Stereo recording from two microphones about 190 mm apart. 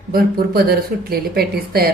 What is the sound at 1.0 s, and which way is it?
Speech, 50° right (ahead or behind).